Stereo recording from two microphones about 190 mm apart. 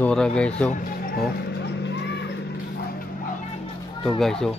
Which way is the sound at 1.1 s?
65° left (ahead or behind).